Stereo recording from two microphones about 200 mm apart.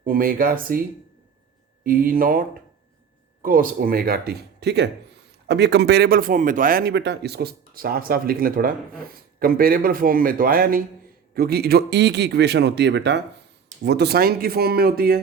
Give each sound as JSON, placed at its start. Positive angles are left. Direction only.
{"t": 0.0, "sound": "speech", "side_deg": -45}
{"t": 1.8, "sound": "speech", "side_deg": -45}
{"t": 3.4, "sound": "speech", "side_deg": -45}